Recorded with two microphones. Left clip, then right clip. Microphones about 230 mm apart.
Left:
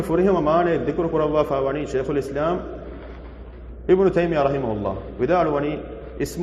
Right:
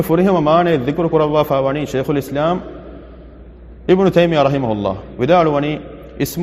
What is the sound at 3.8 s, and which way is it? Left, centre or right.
A man's voice, right.